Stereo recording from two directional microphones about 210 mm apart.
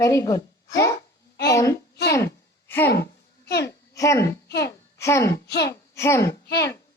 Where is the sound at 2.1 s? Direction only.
10° left (ahead or behind).